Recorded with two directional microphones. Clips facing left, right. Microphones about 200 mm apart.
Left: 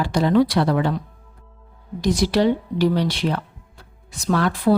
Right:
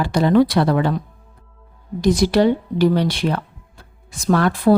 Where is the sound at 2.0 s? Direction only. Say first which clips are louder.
Right 3 dB; 55° right (ahead or behind).